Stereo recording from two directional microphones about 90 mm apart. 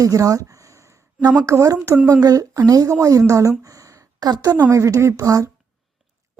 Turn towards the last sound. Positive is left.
turn(degrees=-40)  # may be behind; listen again after turning